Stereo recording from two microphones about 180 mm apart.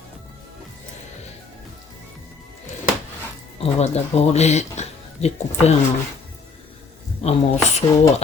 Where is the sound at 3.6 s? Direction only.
35° left (ahead or behind).